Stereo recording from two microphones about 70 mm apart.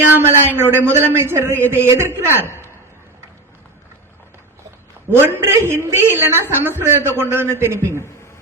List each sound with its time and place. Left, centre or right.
0.2 s a man's voice: right
5.2 s a man's voice: right